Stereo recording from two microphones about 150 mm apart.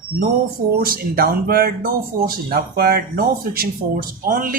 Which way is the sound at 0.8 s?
75° right (ahead or behind).